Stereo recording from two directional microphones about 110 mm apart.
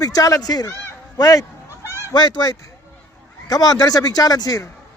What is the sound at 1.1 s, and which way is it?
Honk, 35° left (ahead or behind).